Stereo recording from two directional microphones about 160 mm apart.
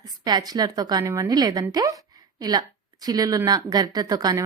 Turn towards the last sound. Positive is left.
turn(degrees=-25)  # may be behind; listen again after turning